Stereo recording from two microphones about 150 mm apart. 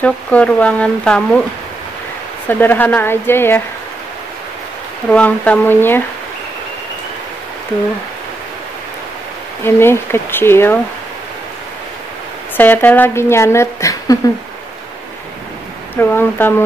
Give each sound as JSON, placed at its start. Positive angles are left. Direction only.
{"t": 0.0, "sound": "speech", "side_deg": 10}
{"t": 2.4, "sound": "speech", "side_deg": 10}
{"t": 5.1, "sound": "speech", "side_deg": 10}
{"t": 9.7, "sound": "speech", "side_deg": 15}
{"t": 12.5, "sound": "speech", "side_deg": 10}
{"t": 16.0, "sound": "speech", "side_deg": 15}